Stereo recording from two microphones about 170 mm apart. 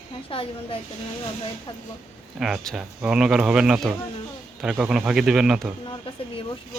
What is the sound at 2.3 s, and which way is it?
Speech, centre (ahead or behind).